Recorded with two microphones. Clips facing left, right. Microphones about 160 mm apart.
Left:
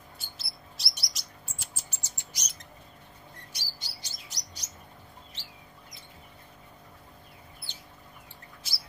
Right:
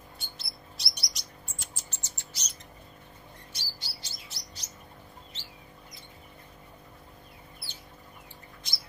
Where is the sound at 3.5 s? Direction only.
15° left (ahead or behind).